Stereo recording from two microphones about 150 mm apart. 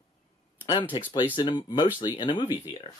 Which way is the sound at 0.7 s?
30° left (ahead or behind).